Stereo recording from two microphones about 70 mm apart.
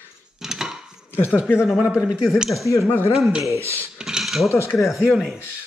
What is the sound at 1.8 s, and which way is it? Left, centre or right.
Speech, centre.